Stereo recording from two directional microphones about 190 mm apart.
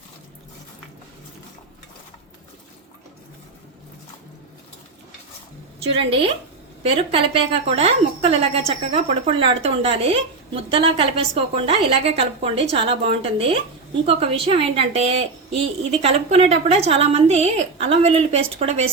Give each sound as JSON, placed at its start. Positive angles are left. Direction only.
{"t": 6.0, "sound": "a woman's voice", "side_deg": -30}